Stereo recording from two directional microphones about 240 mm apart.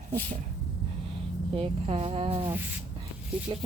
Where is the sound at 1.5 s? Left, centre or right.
Right.